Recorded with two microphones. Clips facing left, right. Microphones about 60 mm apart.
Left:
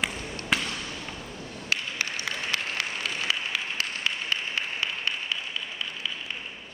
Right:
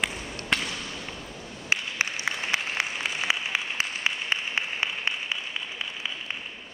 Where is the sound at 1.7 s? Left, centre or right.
Right.